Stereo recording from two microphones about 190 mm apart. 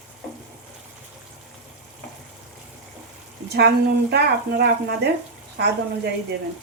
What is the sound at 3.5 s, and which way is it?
Speech, 60° right (ahead or behind).